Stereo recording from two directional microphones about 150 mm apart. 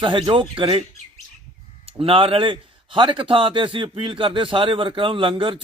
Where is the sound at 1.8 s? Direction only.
40° right (ahead or behind).